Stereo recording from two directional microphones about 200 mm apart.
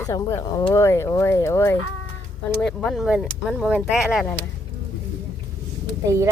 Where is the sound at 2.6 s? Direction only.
5° left (ahead or behind).